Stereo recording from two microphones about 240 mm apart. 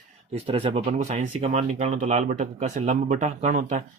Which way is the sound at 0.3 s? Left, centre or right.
Right.